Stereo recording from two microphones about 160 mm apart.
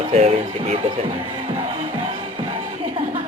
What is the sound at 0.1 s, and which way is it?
Speech, 45° right (ahead or behind).